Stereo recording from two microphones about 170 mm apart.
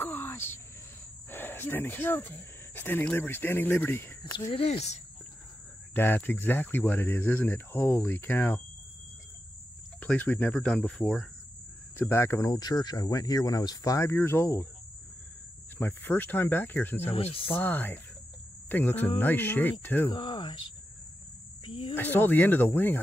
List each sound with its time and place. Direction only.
0.0 s cricket: 10° left (ahead or behind)
1.3 s speech: 10° left (ahead or behind)
4.2 s speech: 25° left (ahead or behind)
5.9 s speech: 10° left (ahead or behind)
9.9 s speech: 10° left (ahead or behind)
15.8 s speech: 10° left (ahead or behind)
17.1 s speech: 35° left (ahead or behind)
17.5 s speech: 10° left (ahead or behind)
20.1 s speech: 30° left (ahead or behind)
21.6 s speech: 30° left (ahead or behind)
21.9 s speech: 10° left (ahead or behind)